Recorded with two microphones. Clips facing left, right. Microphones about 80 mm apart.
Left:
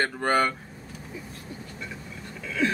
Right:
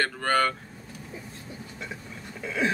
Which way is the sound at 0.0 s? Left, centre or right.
Centre.